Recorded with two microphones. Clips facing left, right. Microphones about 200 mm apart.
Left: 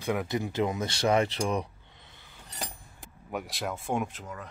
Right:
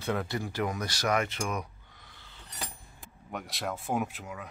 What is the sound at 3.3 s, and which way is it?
Speech, centre (ahead or behind).